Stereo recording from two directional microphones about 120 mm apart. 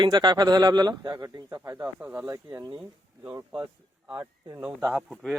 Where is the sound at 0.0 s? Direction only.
35° right (ahead or behind); by 2.2 s 15° right (ahead or behind).